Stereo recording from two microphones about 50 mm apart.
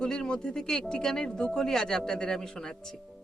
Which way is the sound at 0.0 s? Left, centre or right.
Centre.